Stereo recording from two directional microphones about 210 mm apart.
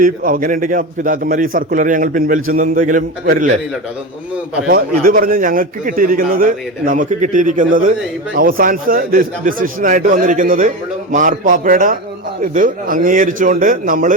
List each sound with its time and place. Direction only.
0.0 s a man's voice: 40° right (ahead or behind)
4.7 s a man's voice: 45° right (ahead or behind)